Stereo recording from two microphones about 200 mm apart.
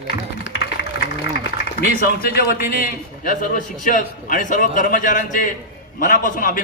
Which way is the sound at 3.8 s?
40° left (ahead or behind).